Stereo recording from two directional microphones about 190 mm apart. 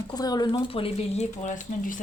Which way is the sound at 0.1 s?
20° left (ahead or behind).